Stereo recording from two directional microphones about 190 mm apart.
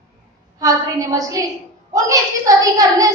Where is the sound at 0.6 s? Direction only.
20° right (ahead or behind).